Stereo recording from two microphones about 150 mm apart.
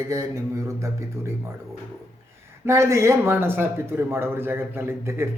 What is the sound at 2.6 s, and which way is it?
Speech, 20° right (ahead or behind).